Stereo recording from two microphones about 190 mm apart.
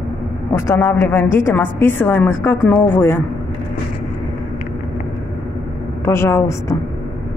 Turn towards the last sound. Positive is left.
turn(degrees=15)  # may be behind; listen again after turning